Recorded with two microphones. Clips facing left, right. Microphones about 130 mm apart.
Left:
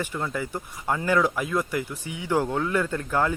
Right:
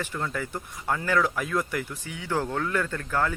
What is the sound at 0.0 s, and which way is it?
Speech, 15° left (ahead or behind).